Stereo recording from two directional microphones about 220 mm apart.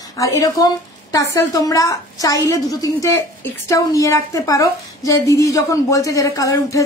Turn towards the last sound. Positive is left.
turn(degrees=15)  # may be behind; listen again after turning